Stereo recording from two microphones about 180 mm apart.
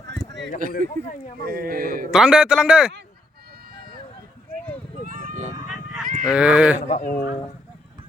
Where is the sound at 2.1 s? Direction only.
5° right (ahead or behind).